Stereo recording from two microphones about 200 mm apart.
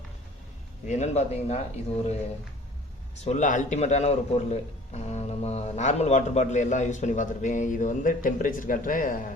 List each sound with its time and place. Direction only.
0.9 s a man's voice: 35° left (ahead or behind)
3.2 s a man's voice: 40° left (ahead or behind)